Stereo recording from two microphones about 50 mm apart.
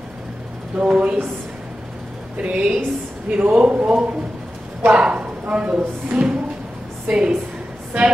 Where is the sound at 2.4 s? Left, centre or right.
Right.